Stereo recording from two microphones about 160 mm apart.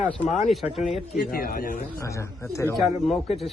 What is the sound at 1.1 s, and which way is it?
Speech, 70° left (ahead or behind).